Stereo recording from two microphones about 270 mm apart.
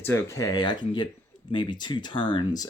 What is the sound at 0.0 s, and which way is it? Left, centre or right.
Speech, centre.